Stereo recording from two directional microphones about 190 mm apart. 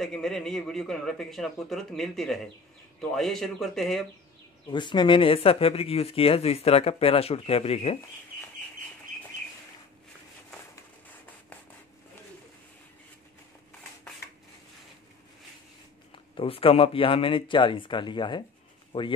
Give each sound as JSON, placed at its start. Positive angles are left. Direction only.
{"t": 0.0, "sound": "speech", "side_deg": 5}
{"t": 4.6, "sound": "speech", "side_deg": 25}
{"t": 16.3, "sound": "speech", "side_deg": 30}